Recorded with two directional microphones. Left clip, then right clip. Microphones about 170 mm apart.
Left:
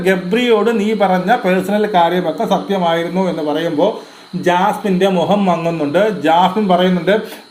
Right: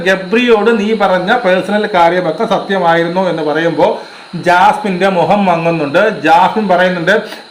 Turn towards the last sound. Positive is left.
turn(degrees=40)  # may be behind; listen again after turning